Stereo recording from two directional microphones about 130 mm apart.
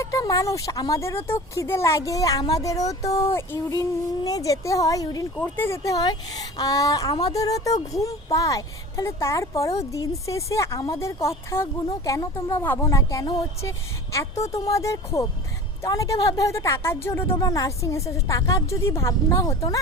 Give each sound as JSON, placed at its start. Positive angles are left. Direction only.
{"t": 0.0, "sound": "a woman's voice", "side_deg": 25}